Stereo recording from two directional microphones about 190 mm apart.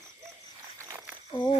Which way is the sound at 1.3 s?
25° left (ahead or behind).